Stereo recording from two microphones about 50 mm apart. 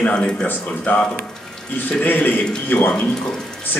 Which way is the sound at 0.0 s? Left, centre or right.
Left.